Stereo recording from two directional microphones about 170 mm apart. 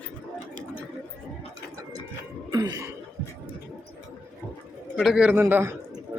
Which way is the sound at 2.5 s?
25° right (ahead or behind).